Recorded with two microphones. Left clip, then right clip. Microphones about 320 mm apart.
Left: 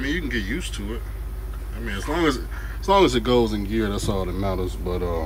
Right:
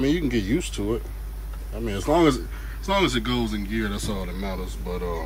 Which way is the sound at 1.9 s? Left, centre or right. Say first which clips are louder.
Right 3 dB; centre.